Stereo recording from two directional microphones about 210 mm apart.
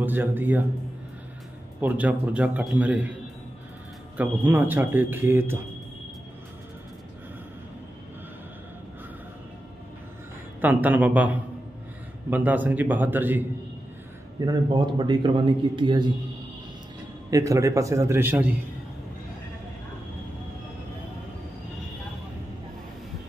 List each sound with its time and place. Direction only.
0.0 s a man's voice: 10° right (ahead or behind)
1.8 s a man's voice: 10° right (ahead or behind)
4.2 s a man's voice: 10° right (ahead or behind)
10.6 s a man's voice: 10° right (ahead or behind)
14.4 s a man's voice: 20° right (ahead or behind)
17.3 s a man's voice: 15° right (ahead or behind)